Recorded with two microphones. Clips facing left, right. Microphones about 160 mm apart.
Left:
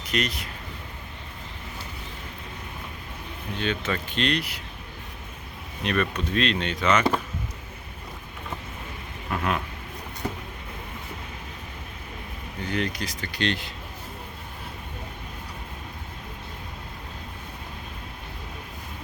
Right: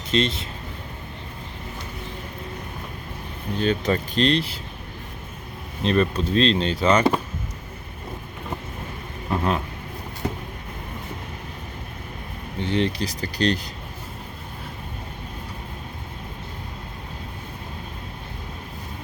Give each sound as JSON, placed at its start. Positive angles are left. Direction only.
{"t": 0.1, "sound": "speech", "side_deg": -25}
{"t": 3.6, "sound": "speech", "side_deg": -40}
{"t": 5.8, "sound": "speech", "side_deg": -30}
{"t": 9.3, "sound": "vehicle", "side_deg": -30}
{"t": 12.5, "sound": "speech", "side_deg": -30}